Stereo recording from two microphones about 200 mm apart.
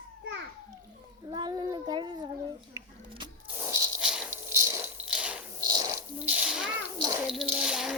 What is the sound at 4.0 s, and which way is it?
Rattle, 5° right (ahead or behind).